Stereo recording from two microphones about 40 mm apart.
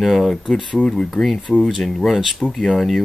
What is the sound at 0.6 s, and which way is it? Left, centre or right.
Speech, centre.